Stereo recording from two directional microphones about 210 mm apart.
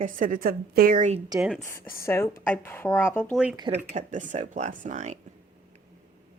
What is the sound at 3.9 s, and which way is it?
A woman's voice, 35° right (ahead or behind).